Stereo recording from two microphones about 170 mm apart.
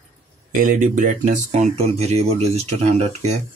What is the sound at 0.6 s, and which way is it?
Speech, 55° right (ahead or behind).